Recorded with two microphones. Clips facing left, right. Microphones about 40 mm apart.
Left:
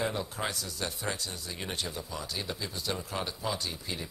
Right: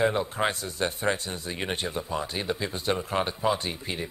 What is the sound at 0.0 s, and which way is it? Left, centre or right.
Speech, right.